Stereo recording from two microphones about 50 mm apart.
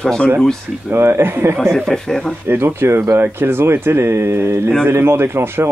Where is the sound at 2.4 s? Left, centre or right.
Right.